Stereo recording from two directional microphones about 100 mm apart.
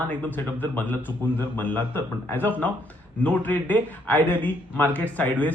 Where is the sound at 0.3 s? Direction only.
20° left (ahead or behind).